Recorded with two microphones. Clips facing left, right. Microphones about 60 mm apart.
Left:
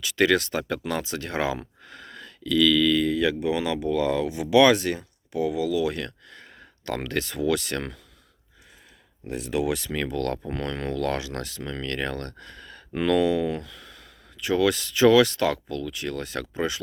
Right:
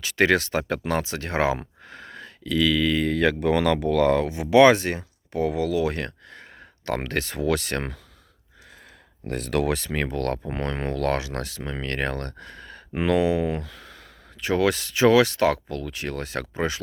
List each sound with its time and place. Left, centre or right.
0.0 s speech: right
3.1 s speech: right
9.2 s speech: right
9.7 s speech: right